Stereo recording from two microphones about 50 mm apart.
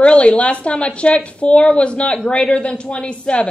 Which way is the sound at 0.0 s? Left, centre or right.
Left.